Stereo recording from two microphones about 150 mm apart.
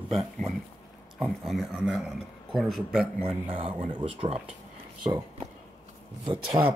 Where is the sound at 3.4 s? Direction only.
35° right (ahead or behind).